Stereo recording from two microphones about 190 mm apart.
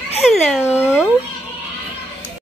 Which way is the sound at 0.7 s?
10° left (ahead or behind).